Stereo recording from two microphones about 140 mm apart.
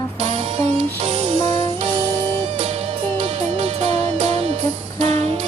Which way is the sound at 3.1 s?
40° right (ahead or behind).